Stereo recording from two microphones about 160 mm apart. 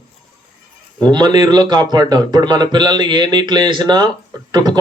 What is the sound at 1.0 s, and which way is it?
Speech, 25° right (ahead or behind).